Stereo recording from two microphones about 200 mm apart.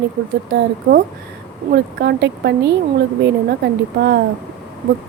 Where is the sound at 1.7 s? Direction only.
55° right (ahead or behind).